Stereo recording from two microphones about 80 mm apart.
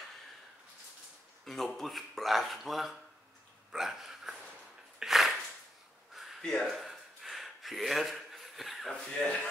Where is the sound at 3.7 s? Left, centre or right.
Centre.